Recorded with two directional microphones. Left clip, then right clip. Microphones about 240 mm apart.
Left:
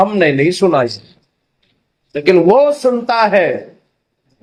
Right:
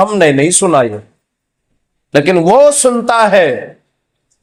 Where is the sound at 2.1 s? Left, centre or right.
Right.